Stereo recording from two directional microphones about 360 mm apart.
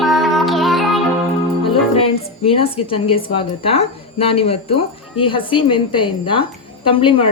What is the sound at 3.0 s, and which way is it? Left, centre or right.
Speech, centre.